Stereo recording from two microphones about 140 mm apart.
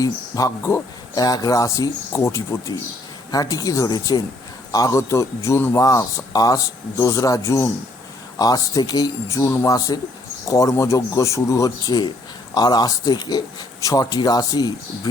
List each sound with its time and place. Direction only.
0.0 s speech: 25° left (ahead or behind)